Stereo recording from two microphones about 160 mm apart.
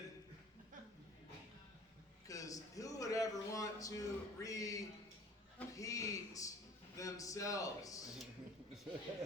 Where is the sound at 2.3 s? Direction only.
20° left (ahead or behind).